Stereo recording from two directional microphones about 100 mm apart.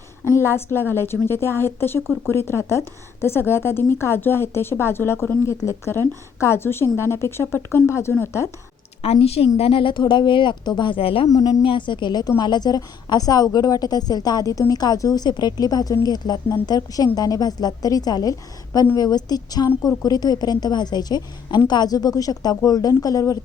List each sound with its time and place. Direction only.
0.3 s a woman's voice: 25° left (ahead or behind)
9.0 s a woman's voice: 85° left
9.6 s speech: 65° left (ahead or behind)
11.3 s a woman's voice: 40° left (ahead or behind)
11.6 s a woman's voice: 55° left (ahead or behind); by 23.4 s 35° left (ahead or behind)